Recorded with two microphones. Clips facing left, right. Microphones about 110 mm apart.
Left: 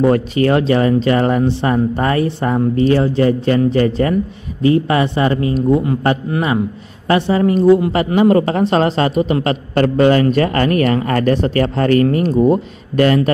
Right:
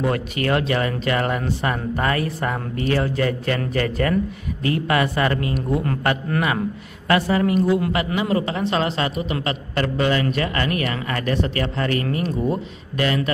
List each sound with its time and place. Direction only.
0.0 s a man's voice: 30° left (ahead or behind)